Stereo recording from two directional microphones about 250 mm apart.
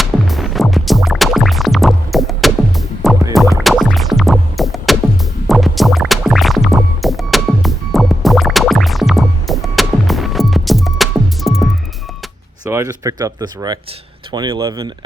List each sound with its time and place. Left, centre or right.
0.0 s music: centre
12.6 s speech: centre